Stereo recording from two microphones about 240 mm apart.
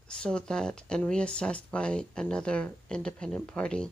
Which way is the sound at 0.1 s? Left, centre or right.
Centre.